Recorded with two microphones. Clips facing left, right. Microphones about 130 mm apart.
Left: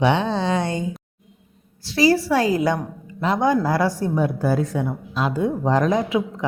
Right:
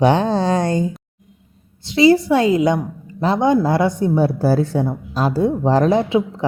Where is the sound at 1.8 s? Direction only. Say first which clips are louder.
Right 5 dB; 20° right (ahead or behind).